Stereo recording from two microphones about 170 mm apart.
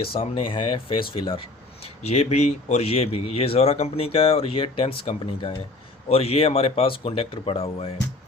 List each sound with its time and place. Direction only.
0.0 s speech: 30° left (ahead or behind)